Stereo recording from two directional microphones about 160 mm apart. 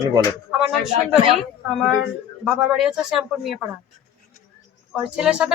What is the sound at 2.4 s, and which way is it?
Speech, centre (ahead or behind).